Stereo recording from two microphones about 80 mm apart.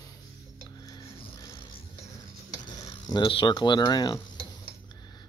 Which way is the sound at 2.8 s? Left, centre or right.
Left.